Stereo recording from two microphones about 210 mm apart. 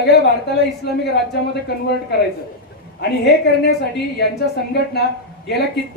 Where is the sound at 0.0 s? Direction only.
50° left (ahead or behind).